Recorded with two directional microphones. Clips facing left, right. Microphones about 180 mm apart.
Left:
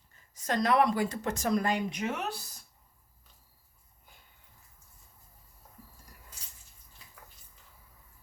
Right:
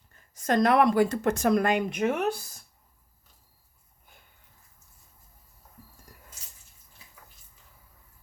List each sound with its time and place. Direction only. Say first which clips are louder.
0.3 s speech: right 5 dB; 50° right (ahead or behind)